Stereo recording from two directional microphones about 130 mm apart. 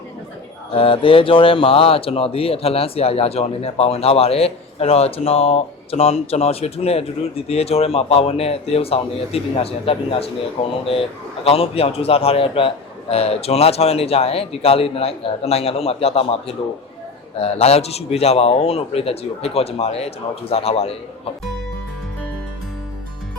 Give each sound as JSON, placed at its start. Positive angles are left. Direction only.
{"t": 0.7, "sound": "speech", "side_deg": 45}